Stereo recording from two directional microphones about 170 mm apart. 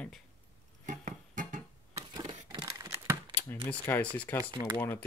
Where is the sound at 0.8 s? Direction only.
50° right (ahead or behind).